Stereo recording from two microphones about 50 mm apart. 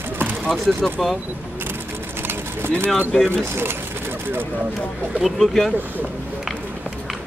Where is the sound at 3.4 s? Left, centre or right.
Right.